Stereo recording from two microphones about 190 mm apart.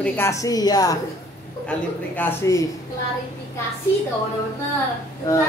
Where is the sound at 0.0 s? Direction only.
10° left (ahead or behind).